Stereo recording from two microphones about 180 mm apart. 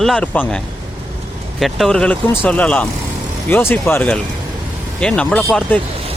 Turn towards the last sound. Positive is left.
turn(degrees=5)  # may be behind; listen again after turning